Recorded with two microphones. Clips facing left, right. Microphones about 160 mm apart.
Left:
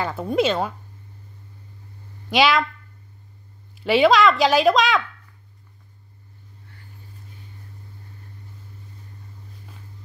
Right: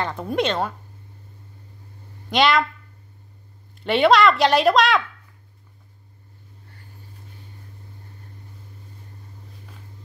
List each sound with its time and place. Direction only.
0.0 s speech: 5° left (ahead or behind)
2.2 s speech: 5° left (ahead or behind)
3.8 s speech: centre (ahead or behind)